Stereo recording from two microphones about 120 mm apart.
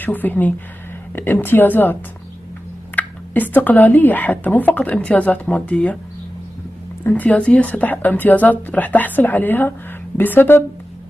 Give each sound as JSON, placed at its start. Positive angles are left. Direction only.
{"t": 0.0, "sound": "speech", "side_deg": 15}
{"t": 3.0, "sound": "speech", "side_deg": 15}
{"t": 7.0, "sound": "speech", "side_deg": 15}